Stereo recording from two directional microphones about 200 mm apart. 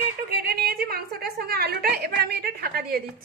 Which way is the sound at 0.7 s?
50° right (ahead or behind).